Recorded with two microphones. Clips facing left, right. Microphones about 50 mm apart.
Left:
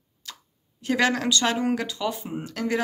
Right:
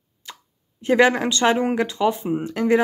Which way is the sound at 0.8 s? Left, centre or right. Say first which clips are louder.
Right 6 dB; right.